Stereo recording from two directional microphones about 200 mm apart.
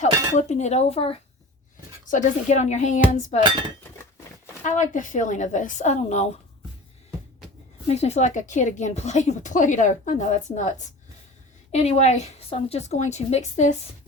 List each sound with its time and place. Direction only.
0.0 s a woman's voice: 35° left (ahead or behind)
4.6 s a woman's voice: 40° left (ahead or behind)
7.9 s a woman's voice: 30° left (ahead or behind)